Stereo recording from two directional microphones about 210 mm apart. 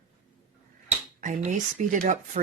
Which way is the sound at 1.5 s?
35° right (ahead or behind).